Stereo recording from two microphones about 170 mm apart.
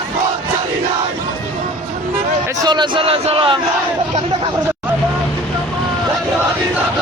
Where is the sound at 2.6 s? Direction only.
25° right (ahead or behind).